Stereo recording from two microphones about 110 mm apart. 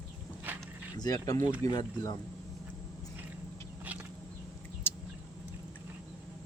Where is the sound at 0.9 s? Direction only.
35° left (ahead or behind).